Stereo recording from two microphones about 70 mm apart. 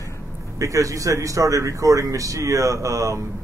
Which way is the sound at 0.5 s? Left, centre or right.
Right.